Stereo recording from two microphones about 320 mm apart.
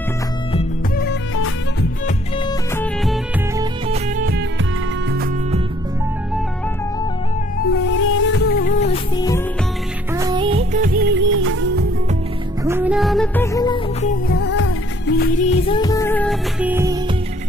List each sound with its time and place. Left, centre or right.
0.5 s music: centre
1.0 s music: left
2.7 s music: centre
4.2 s music: right
7.5 s music: left; by 9.4 s centre
10.1 s music: centre; by 11.8 s right
12.6 s music: centre
14.0 s music: left; by 17.0 s centre